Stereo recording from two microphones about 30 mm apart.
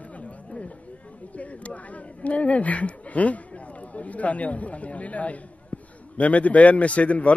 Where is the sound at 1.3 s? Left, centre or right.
Left.